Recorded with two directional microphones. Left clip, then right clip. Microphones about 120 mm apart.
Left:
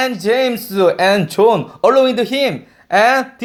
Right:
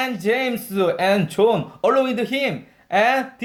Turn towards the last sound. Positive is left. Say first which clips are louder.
# left 6 dB
turn(degrees=30)  # may be behind; listen again after turning